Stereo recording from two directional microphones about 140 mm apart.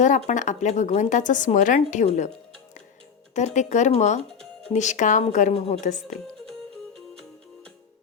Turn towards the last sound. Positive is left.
turn(degrees=60)  # may be behind; listen again after turning